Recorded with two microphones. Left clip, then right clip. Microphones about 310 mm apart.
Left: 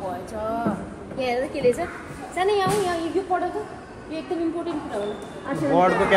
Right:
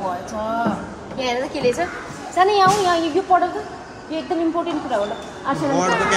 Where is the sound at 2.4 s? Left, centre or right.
Right.